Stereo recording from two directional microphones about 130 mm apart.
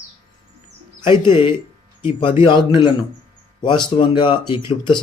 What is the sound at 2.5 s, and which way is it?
Speech, 35° left (ahead or behind).